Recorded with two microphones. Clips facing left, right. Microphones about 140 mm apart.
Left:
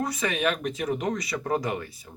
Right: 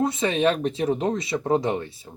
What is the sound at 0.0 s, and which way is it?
Speech, 25° right (ahead or behind).